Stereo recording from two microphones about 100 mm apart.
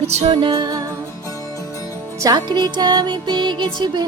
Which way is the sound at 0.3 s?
50° right (ahead or behind).